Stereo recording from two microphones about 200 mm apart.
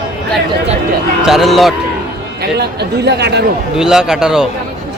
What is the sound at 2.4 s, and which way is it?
Speech, 55° right (ahead or behind).